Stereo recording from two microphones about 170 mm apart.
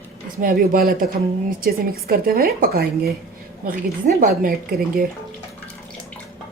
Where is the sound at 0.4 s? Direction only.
55° right (ahead or behind).